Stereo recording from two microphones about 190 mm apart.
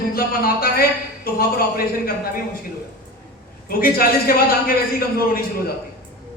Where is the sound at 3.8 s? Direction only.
50° left (ahead or behind).